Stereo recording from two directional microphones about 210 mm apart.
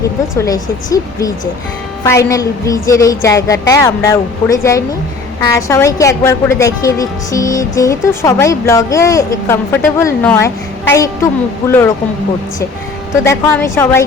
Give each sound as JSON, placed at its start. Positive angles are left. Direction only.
{"t": 0.3, "sound": "a woman's voice", "side_deg": 15}
{"t": 13.2, "sound": "a woman's voice", "side_deg": 10}